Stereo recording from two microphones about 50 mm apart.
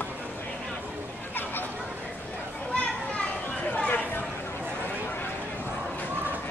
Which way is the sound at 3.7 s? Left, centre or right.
Left.